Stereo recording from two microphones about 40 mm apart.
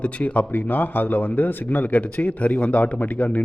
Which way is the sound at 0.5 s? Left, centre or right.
Left.